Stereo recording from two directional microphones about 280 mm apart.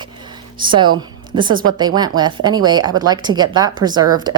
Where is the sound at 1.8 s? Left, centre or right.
Centre.